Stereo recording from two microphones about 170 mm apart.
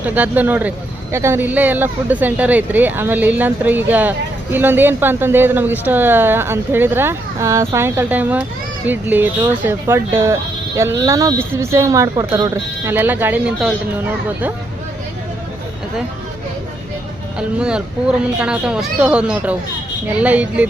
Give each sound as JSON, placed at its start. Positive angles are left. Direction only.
{"t": 0.0, "sound": "speech", "side_deg": -10}
{"t": 12.9, "sound": "speech", "side_deg": -10}
{"t": 17.6, "sound": "speech", "side_deg": -5}